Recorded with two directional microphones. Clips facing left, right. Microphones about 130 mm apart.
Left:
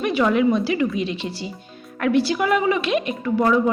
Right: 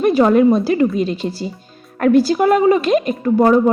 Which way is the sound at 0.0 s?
40° right (ahead or behind).